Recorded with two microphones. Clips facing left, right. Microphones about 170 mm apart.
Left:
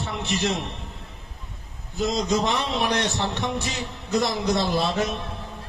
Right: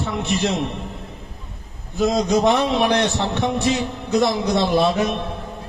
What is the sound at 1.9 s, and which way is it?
A man's voice, 55° right (ahead or behind).